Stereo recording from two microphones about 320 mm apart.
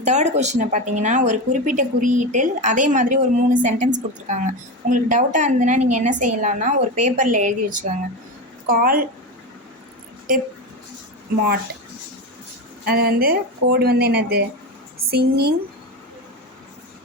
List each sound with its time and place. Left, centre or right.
0.0 s speech: right
12.8 s speech: right